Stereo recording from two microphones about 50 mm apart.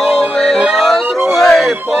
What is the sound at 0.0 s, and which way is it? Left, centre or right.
Music, centre.